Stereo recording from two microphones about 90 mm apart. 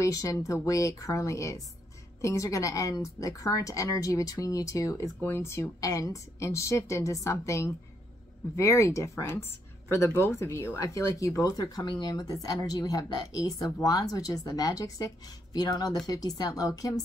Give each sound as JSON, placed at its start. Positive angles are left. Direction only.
{"t": 0.0, "sound": "speech", "side_deg": 40}
{"t": 11.8, "sound": "speech", "side_deg": 55}